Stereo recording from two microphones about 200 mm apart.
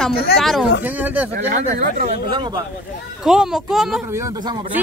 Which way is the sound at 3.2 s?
5° right (ahead or behind).